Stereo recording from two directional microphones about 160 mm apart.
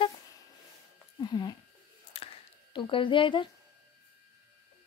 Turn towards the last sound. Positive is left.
turn(degrees=30)  # may be behind; listen again after turning